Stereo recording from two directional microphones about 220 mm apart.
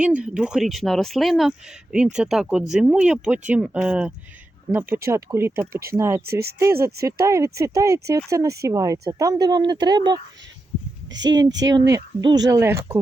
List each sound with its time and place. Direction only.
0.0 s speech: 5° right (ahead or behind)
6.2 s speech: 45° right (ahead or behind)
6.6 s speech: 10° right (ahead or behind)
11.1 s speech: 55° right (ahead or behind)
11.6 s speech: 15° right (ahead or behind)